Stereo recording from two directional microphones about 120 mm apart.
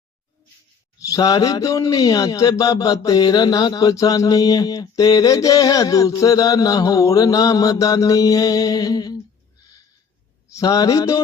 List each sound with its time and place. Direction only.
0.9 s speech: 30° left (ahead or behind)
10.5 s speech: 30° left (ahead or behind)